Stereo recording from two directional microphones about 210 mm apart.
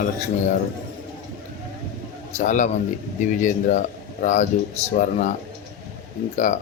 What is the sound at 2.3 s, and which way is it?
Speech, 35° left (ahead or behind).